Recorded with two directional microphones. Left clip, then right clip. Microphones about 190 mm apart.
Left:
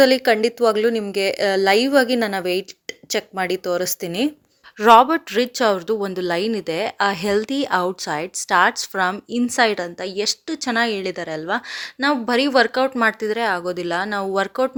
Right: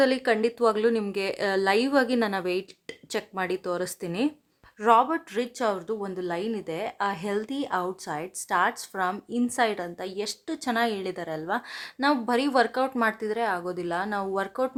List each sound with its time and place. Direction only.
0.0 s a woman's voice: 20° left (ahead or behind)
4.8 s speech: 30° left (ahead or behind)